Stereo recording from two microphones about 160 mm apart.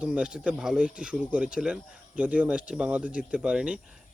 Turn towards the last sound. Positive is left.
turn(degrees=-5)  # may be behind; listen again after turning